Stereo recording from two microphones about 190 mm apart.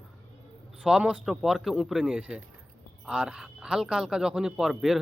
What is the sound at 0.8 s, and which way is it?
A man's voice, 5° right (ahead or behind).